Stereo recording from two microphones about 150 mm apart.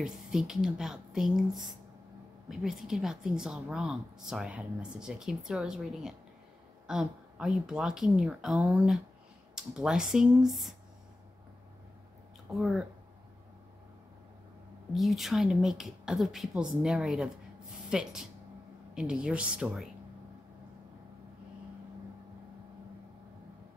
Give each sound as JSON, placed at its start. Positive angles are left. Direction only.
{"t": 0.0, "sound": "a woman's voice", "side_deg": -5}
{"t": 2.5, "sound": "a woman's voice", "side_deg": -5}
{"t": 12.5, "sound": "a woman's voice", "side_deg": 0}
{"t": 15.0, "sound": "a woman's voice", "side_deg": 0}